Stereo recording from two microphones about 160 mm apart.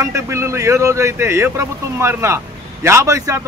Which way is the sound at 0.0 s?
15° right (ahead or behind).